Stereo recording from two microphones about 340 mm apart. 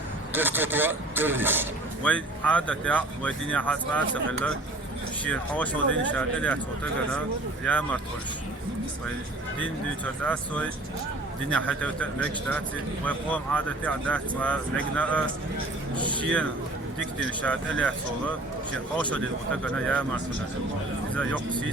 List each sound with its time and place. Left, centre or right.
0.3 s speech: centre
7.6 s speech: centre
10.2 s speech: centre
16.2 s speech: centre
17.0 s speech: right
17.4 s speech: centre
19.6 s speech: centre
21.2 s speech: centre